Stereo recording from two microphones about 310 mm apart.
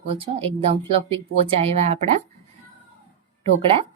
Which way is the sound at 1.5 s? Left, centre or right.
Centre.